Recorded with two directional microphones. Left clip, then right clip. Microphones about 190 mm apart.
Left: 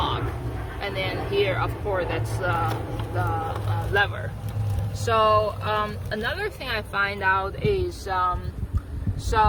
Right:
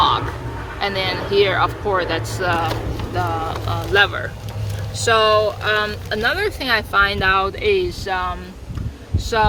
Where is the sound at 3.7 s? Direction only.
50° right (ahead or behind).